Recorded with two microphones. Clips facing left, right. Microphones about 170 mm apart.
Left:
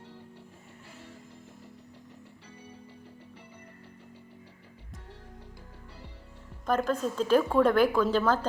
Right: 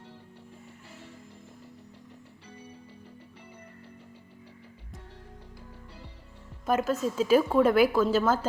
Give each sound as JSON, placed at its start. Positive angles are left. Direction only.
{"t": 6.7, "sound": "a woman's voice", "side_deg": -5}